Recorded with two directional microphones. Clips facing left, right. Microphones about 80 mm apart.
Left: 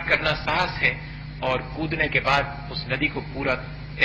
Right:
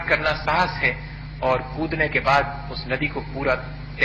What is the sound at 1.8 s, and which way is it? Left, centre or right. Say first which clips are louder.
A man's voice: right 2 dB; right.